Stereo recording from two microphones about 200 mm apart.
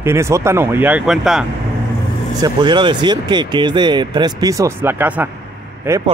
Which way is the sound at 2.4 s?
25° right (ahead or behind).